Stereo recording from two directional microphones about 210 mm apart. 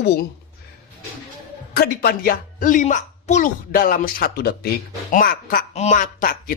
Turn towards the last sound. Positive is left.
turn(degrees=40)  # may be behind; listen again after turning